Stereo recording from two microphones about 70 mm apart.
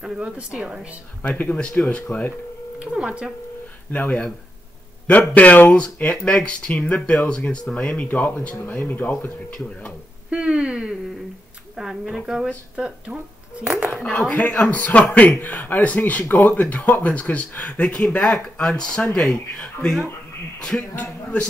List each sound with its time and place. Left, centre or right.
0.0 s speech: centre
1.2 s speech: centre
2.8 s speech: centre
3.9 s speech: left
5.3 s speech: left
10.3 s speech: centre
11.7 s speech: centre
14.3 s speech: centre
20.9 s speech: centre